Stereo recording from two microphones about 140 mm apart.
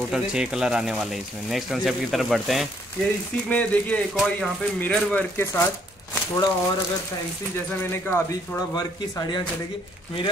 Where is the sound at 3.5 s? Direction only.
10° left (ahead or behind).